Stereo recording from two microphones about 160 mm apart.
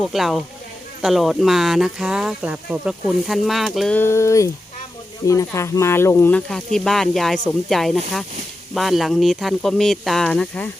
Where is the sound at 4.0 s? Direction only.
15° left (ahead or behind).